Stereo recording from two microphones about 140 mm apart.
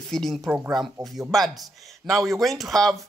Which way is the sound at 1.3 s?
Centre (ahead or behind).